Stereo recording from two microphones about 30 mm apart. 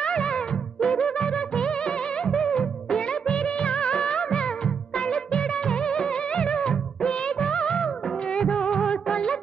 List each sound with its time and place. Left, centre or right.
0.0 s music: left
4.9 s music of bollywood: left